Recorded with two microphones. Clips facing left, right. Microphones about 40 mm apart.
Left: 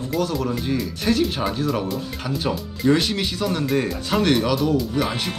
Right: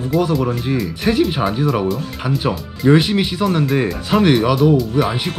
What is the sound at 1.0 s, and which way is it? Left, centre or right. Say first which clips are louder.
Speech: right 5 dB; centre.